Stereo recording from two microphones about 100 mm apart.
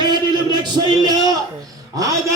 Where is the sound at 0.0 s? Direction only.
45° right (ahead or behind).